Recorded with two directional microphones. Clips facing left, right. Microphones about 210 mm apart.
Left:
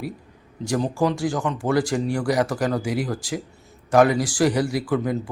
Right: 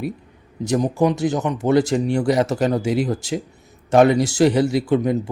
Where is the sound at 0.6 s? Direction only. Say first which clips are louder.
Right 4 dB; 20° right (ahead or behind).